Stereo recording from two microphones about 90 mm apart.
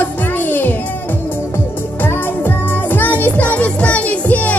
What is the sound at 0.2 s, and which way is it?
Music, 20° left (ahead or behind).